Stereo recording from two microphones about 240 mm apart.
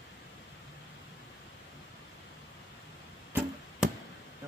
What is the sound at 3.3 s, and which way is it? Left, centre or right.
Arrow, centre.